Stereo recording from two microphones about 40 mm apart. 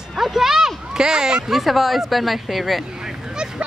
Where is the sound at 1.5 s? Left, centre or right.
Centre.